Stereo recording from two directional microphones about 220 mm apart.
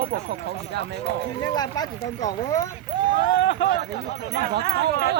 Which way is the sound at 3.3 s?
55° left (ahead or behind).